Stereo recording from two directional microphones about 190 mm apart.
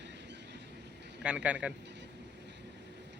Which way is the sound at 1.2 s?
5° right (ahead or behind).